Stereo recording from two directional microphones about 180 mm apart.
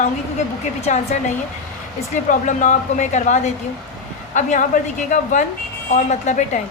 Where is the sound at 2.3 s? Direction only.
45° left (ahead or behind).